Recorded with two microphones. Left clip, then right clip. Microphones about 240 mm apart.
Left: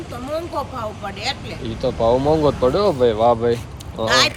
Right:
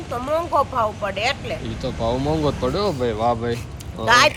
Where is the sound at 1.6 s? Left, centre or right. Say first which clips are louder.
Left 6 dB; centre.